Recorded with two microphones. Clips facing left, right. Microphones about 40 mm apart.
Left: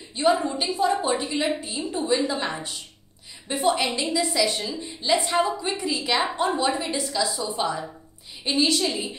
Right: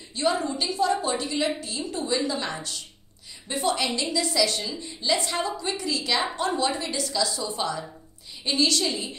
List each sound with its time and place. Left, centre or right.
0.1 s a woman's voice: centre